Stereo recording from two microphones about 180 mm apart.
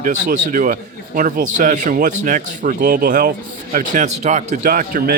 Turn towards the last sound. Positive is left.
turn(degrees=-50)  # may be behind; listen again after turning